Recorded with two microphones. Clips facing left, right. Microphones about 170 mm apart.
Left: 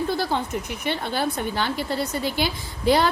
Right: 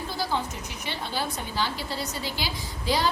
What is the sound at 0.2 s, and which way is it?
A woman's voice, 60° left (ahead or behind).